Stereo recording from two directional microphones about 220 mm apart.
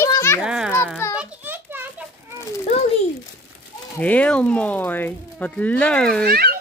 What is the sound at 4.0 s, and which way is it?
Speech, 5° left (ahead or behind).